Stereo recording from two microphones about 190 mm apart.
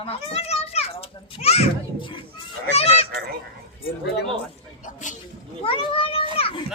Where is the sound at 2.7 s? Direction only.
30° left (ahead or behind).